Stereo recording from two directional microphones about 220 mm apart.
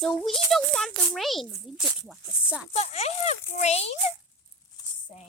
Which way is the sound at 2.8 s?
30° left (ahead or behind).